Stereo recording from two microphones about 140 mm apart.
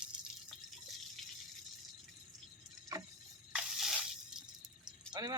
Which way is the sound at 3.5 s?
Centre (ahead or behind).